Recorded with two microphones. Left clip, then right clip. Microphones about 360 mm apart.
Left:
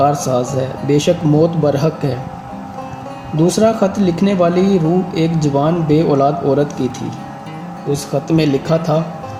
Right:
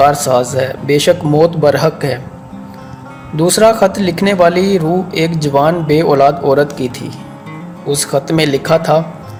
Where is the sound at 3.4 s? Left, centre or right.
Right.